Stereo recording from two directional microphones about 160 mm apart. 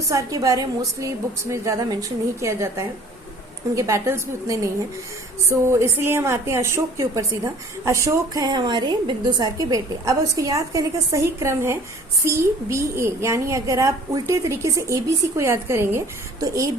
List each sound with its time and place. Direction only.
0.1 s a woman's voice: 20° right (ahead or behind)